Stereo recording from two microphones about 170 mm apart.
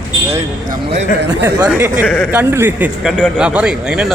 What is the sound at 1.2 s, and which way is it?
Speech, 90° right.